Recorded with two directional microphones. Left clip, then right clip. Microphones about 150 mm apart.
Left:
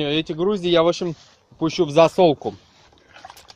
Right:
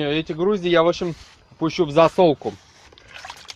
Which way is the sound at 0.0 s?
30° left (ahead or behind).